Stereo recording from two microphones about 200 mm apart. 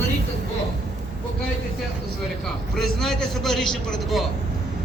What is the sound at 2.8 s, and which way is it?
A man's voice, centre (ahead or behind).